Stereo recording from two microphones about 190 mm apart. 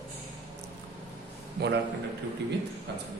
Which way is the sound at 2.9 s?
65° right (ahead or behind).